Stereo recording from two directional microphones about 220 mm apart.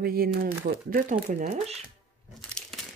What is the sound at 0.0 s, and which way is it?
Speech, 45° right (ahead or behind).